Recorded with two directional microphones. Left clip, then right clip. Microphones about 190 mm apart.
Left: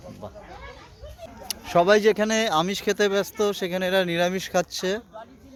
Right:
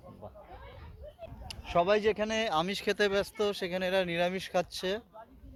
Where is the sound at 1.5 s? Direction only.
25° left (ahead or behind).